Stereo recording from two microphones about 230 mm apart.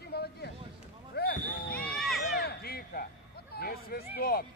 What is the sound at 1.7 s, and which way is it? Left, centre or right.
Run, centre.